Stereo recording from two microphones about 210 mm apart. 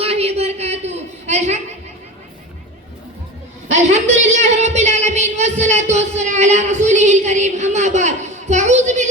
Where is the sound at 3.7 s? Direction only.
35° right (ahead or behind).